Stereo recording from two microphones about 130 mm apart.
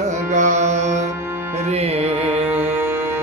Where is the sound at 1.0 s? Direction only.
20° right (ahead or behind).